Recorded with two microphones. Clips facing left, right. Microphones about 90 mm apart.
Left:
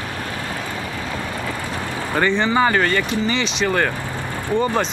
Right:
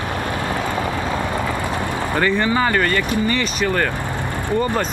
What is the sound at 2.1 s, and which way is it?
Speech, centre (ahead or behind).